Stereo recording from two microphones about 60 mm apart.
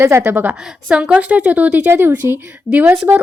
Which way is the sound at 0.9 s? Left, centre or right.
Centre.